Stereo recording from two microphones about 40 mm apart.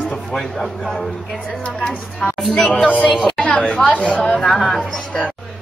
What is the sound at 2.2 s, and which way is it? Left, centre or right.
Speech, left.